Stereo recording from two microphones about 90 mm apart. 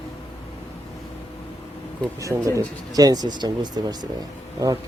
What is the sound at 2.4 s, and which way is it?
Speech, 45° right (ahead or behind).